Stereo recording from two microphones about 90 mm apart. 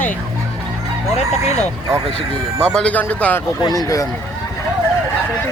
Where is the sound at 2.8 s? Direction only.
15° left (ahead or behind).